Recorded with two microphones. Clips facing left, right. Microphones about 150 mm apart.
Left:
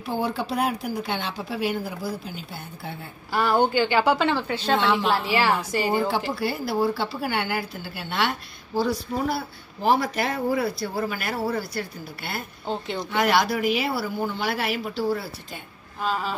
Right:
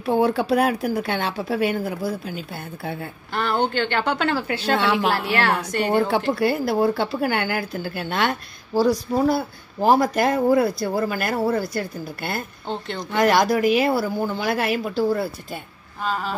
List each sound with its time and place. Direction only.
0.0 s speech: 60° right (ahead or behind)
3.3 s a woman's voice: 5° left (ahead or behind)
5.9 s speech: 60° right (ahead or behind)
12.6 s a woman's voice: 5° left (ahead or behind)
13.1 s speech: 45° right (ahead or behind)
16.0 s a woman's voice: centre (ahead or behind)